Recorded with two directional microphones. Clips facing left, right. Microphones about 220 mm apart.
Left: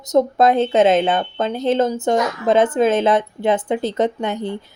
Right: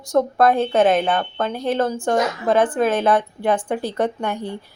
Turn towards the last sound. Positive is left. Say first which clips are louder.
# left 3 dB
turn(degrees=20)  # may be behind; listen again after turning